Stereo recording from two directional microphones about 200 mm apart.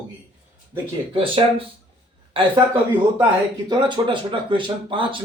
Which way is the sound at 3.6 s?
25° right (ahead or behind).